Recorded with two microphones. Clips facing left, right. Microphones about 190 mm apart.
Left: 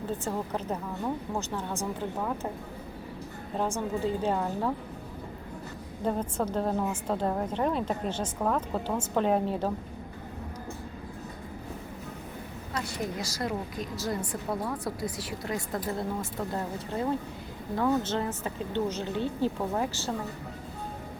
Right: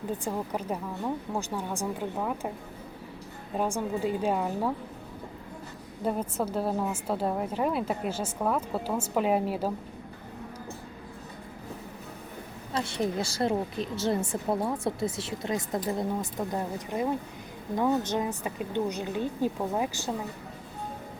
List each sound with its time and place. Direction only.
0.3 s a woman's voice: 10° right (ahead or behind)
3.8 s a woman's voice: 10° right (ahead or behind)
6.1 s a woman's voice: 10° right (ahead or behind)
12.7 s a woman's voice: 25° right (ahead or behind)